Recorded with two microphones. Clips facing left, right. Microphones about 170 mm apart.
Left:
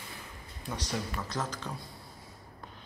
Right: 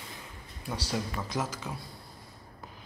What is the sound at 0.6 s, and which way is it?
A man's voice, 10° right (ahead or behind).